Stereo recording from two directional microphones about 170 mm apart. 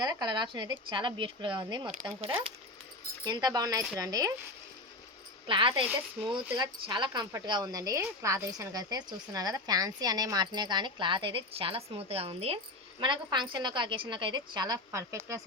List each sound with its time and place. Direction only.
0.0 s a woman's voice: 25° right (ahead or behind)
3.2 s a woman's voice: 20° right (ahead or behind)
5.5 s a woman's voice: 30° right (ahead or behind)